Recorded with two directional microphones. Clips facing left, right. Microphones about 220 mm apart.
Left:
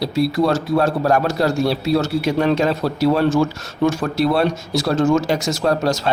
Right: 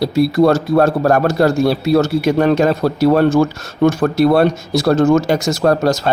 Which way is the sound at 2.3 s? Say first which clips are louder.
Right 4 dB; 45° right (ahead or behind).